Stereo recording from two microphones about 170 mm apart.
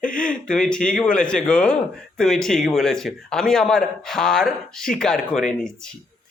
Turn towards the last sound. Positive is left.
turn(degrees=5)  # may be behind; listen again after turning